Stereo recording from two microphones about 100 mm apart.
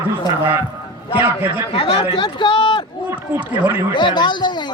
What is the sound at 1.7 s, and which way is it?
Speech, 50° left (ahead or behind).